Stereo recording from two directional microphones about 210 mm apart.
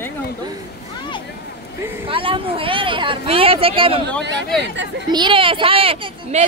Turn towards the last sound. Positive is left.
turn(degrees=-25)  # may be behind; listen again after turning